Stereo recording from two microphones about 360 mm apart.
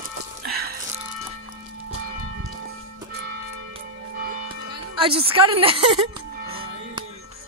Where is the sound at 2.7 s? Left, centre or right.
Right.